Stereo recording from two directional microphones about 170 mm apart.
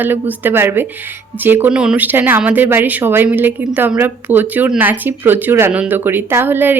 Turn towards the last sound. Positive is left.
turn(degrees=-10)  # may be behind; listen again after turning